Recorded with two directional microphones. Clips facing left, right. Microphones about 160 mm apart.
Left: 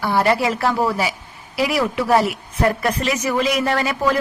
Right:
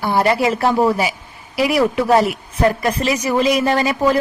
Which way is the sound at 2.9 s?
25° right (ahead or behind).